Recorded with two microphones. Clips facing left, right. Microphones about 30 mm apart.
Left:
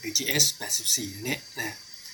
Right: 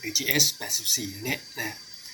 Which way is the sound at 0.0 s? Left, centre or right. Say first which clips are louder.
Right 1 dB; centre.